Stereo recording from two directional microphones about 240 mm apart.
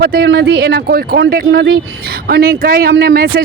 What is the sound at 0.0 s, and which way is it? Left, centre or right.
A man's voice, right.